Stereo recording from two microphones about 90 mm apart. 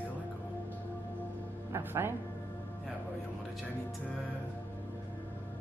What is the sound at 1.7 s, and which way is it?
Speech, 25° right (ahead or behind).